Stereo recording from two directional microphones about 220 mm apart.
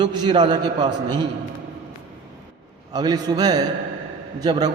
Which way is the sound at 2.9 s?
20° right (ahead or behind).